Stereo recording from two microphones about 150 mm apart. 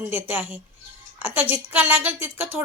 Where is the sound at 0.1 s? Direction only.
15° right (ahead or behind).